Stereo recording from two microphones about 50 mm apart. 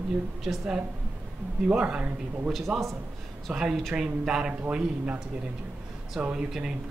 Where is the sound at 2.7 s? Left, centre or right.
Centre.